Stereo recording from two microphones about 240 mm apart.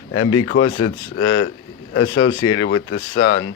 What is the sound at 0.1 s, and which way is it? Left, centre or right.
Speech, left.